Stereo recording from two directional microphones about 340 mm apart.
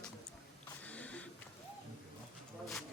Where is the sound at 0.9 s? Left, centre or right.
Centre.